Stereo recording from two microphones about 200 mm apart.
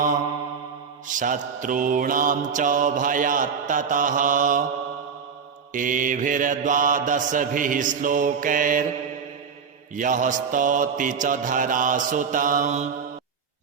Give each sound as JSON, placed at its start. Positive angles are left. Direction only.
{"t": 1.0, "sound": "mantra", "side_deg": -40}
{"t": 5.7, "sound": "mantra", "side_deg": -40}
{"t": 9.9, "sound": "mantra", "side_deg": -40}